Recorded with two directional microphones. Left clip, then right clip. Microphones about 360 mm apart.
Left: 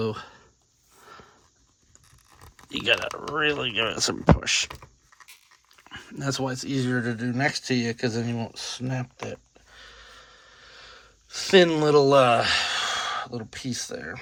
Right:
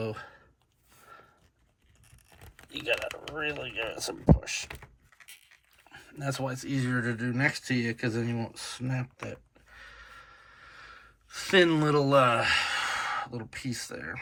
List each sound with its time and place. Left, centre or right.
0.0 s speech: centre
2.9 s speech: left
6.1 s speech: centre